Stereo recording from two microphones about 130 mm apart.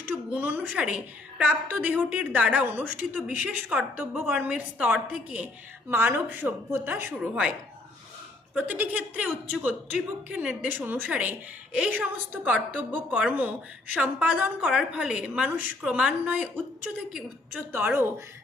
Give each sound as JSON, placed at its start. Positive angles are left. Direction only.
{"t": 0.1, "sound": "a woman's voice", "side_deg": -15}
{"t": 8.5, "sound": "a woman's voice", "side_deg": -15}
{"t": 17.7, "sound": "a woman's voice", "side_deg": -15}